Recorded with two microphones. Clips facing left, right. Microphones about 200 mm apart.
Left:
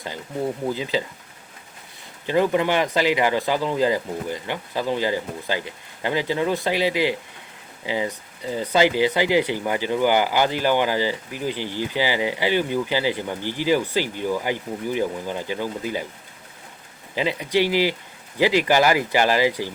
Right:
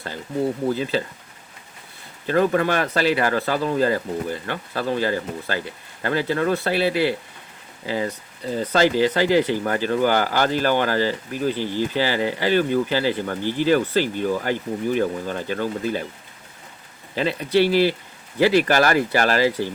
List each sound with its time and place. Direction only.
0.7 s speech: 15° left (ahead or behind)
2.2 s speech: 15° left (ahead or behind)
17.2 s speech: 15° left (ahead or behind)